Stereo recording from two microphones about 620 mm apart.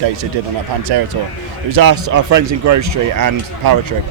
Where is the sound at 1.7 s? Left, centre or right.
Right.